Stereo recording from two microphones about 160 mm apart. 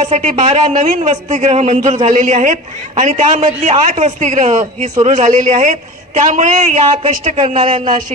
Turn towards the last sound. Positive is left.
turn(degrees=-50)  # may be behind; listen again after turning